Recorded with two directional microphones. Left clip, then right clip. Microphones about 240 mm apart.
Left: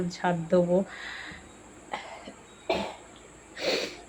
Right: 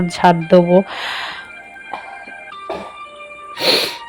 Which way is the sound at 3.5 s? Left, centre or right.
Right.